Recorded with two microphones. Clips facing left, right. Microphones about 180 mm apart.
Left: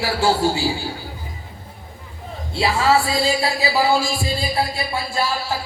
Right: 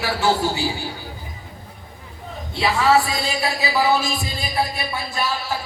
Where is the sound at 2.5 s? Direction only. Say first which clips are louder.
Even; 25° left (ahead or behind).